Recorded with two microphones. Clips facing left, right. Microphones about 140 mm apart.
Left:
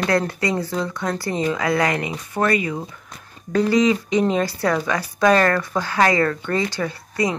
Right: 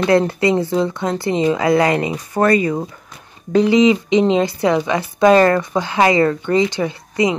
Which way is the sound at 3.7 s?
20° right (ahead or behind).